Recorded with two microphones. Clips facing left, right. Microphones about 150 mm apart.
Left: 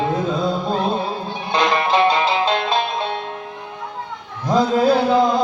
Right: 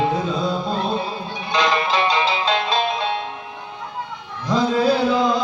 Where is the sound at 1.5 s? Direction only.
55° left (ahead or behind).